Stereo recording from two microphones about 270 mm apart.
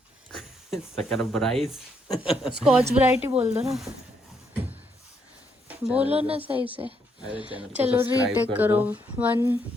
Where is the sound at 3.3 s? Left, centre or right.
Right.